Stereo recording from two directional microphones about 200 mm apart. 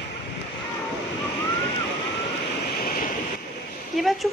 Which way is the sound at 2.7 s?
45° left (ahead or behind).